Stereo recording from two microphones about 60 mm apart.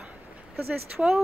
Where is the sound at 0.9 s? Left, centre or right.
Centre.